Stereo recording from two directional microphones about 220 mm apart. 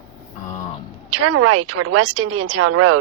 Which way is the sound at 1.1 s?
90° right.